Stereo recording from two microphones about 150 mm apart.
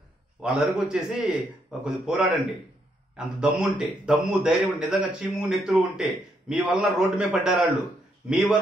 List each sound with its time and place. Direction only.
0.4 s a man's voice: 5° right (ahead or behind)